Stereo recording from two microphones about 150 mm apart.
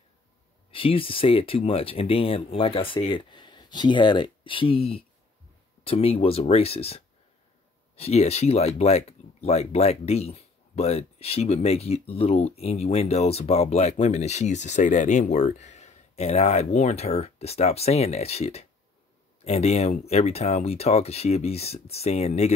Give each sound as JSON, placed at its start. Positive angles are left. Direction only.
{"t": 0.7, "sound": "speech", "side_deg": 35}